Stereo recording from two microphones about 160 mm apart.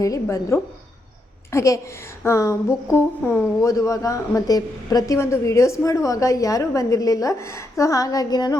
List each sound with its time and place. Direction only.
0.0 s a woman's voice: 20° left (ahead or behind)